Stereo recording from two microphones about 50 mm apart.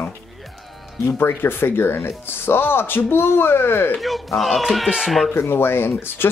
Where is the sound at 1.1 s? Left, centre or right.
Left.